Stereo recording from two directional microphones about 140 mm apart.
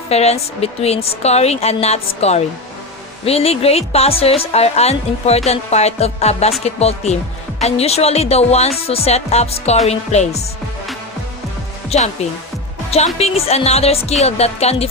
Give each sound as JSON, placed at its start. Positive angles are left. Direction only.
{"t": 0.1, "sound": "a woman's voice", "side_deg": 50}
{"t": 11.9, "sound": "a woman's voice", "side_deg": 50}
{"t": 13.1, "sound": "a woman's voice", "side_deg": 45}